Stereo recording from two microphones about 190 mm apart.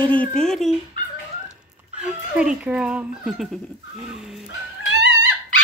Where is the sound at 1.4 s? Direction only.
5° right (ahead or behind).